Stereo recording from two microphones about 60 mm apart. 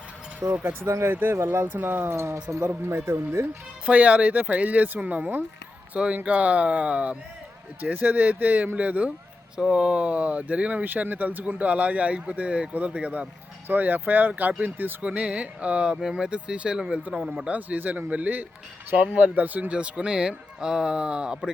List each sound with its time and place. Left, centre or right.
0.6 s speech: right
1.6 s speech: right
2.1 s speech: right
3.8 s speech: right
9.6 s speech: centre; by 14.9 s right
15.0 s speech: centre
17.5 s speech: right